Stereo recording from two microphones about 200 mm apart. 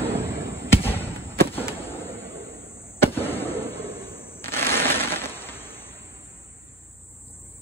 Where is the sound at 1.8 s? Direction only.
10° left (ahead or behind).